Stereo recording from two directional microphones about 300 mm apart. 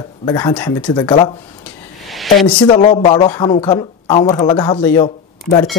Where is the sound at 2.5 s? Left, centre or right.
Centre.